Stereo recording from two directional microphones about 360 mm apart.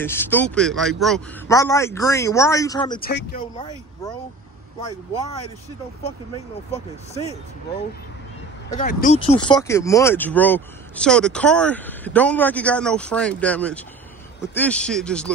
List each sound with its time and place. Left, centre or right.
0.0 s a man's voice: centre
3.0 s speech: left
6.0 s a man's voice: centre
8.7 s speech: left; by 15.3 s centre